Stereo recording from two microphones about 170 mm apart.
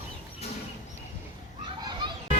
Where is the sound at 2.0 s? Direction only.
30° right (ahead or behind).